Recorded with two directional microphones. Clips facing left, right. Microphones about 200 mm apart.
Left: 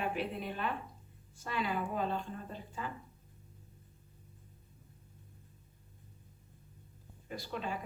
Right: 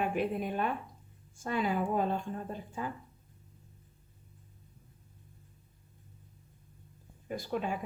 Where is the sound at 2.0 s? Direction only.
50° right (ahead or behind).